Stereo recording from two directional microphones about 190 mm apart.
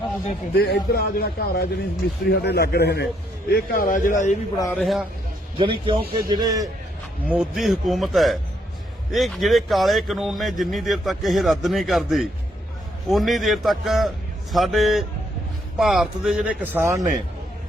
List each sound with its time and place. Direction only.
0.5 s speech: 55° left (ahead or behind)
3.5 s speech: 45° left (ahead or behind)
4.5 s speech: 15° left (ahead or behind)
4.8 s speech: centre (ahead or behind)
5.5 s a man's voice: 25° right (ahead or behind)
7.3 s speech: centre (ahead or behind)